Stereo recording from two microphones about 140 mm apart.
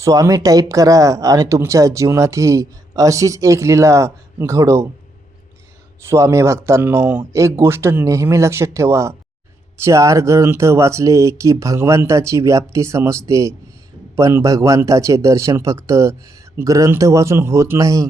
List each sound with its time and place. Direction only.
0.0 s speech: 25° right (ahead or behind)
6.1 s speech: 20° right (ahead or behind)